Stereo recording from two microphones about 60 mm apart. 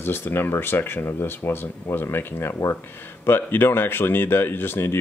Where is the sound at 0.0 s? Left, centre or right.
Left.